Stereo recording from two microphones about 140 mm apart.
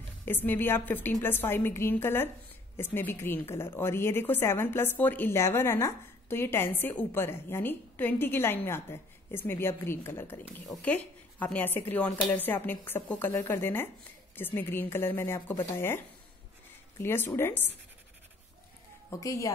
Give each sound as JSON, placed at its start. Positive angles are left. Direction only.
{"t": 0.2, "sound": "a woman's voice", "side_deg": 15}
{"t": 17.0, "sound": "a woman's voice", "side_deg": 15}
{"t": 19.0, "sound": "a woman's voice", "side_deg": 20}